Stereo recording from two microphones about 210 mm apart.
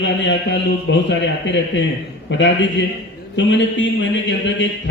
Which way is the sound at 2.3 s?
60° left (ahead or behind).